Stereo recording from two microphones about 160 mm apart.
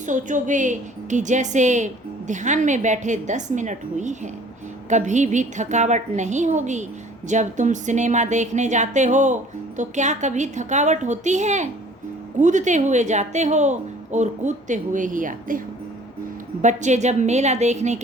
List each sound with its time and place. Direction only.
0.0 s speech: 50° right (ahead or behind)